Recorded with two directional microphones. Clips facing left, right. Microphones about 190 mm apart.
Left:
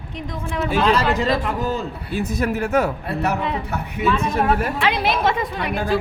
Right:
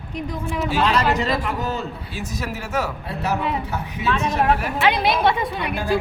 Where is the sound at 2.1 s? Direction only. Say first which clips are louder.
Left 9 dB; 55° left (ahead or behind).